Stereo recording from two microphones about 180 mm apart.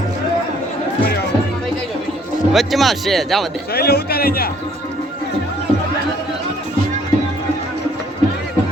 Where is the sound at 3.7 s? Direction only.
60° left (ahead or behind).